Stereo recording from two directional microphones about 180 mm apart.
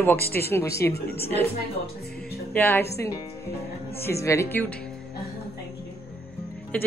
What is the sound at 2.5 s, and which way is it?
Speech, 10° left (ahead or behind).